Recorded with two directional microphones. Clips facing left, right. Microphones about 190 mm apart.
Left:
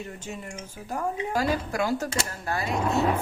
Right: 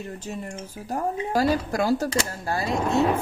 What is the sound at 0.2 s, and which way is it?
Speech, 35° right (ahead or behind).